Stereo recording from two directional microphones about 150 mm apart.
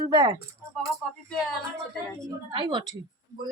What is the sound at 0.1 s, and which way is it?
Speech, 25° right (ahead or behind).